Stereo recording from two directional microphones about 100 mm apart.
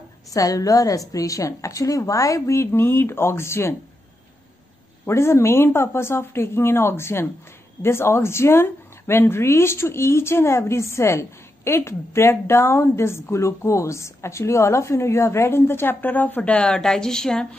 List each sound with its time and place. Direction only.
0.3 s a woman's voice: 35° left (ahead or behind)
5.0 s speech: 25° left (ahead or behind); by 17.5 s 5° left (ahead or behind)